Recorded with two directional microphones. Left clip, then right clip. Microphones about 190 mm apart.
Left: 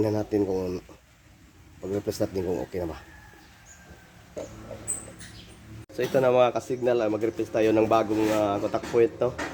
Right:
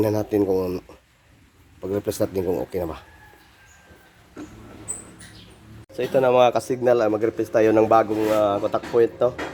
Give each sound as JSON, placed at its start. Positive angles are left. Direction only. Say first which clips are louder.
{"t": 0.0, "sound": "speech", "louder": "right 4 dB", "side_deg": -35}
{"t": 6.0, "sound": "speech", "louder": "right 4 dB", "side_deg": -10}
{"t": 6.4, "sound": "speech", "louder": "right 5 dB", "side_deg": -35}